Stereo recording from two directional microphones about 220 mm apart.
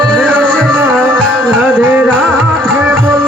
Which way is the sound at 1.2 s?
10° right (ahead or behind).